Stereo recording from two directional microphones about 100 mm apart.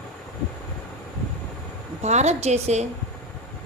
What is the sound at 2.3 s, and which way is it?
Speech, 90° right.